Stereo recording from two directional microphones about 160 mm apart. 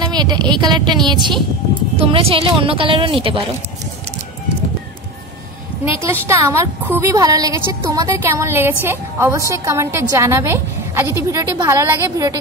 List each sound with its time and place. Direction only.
0.1 s a woman's voice: 25° right (ahead or behind)
6.2 s a woman's voice: 15° right (ahead or behind)